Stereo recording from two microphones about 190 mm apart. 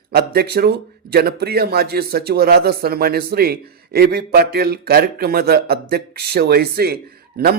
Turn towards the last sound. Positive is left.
turn(degrees=-55)  # may be behind; listen again after turning